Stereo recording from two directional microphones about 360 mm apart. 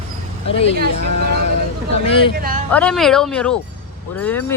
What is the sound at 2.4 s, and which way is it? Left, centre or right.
Speech, right.